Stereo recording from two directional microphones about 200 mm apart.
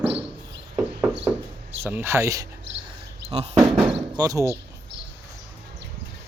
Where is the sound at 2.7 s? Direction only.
65° right (ahead or behind).